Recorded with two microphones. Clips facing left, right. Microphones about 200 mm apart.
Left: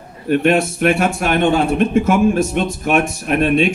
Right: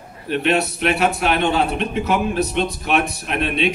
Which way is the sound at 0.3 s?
50° left (ahead or behind).